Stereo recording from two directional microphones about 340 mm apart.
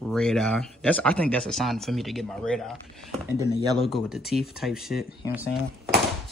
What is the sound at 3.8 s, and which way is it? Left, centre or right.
Speech, centre.